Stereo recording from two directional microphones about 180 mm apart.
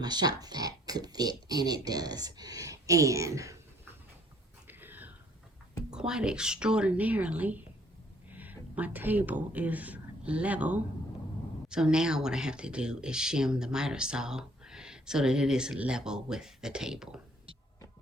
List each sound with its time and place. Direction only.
0.0 s speech: 20° right (ahead or behind)
4.7 s a sound: 10° right (ahead or behind)
5.9 s speech: 5° right (ahead or behind)